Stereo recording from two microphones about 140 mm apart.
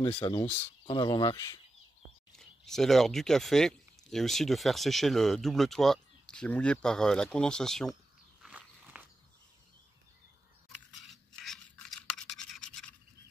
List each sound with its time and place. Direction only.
0.0 s speech: 30° left (ahead or behind)
0.9 s speech: 35° left (ahead or behind)
2.3 s speech: 5° left (ahead or behind)
8.4 s walk: 5° right (ahead or behind)
10.9 s scratch: centre (ahead or behind)